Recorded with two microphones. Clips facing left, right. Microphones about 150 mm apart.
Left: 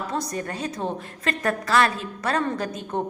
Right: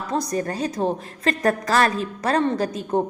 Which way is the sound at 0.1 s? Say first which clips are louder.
Right 4 dB; 35° right (ahead or behind).